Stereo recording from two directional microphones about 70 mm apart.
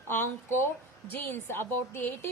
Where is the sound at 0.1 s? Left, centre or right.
Left.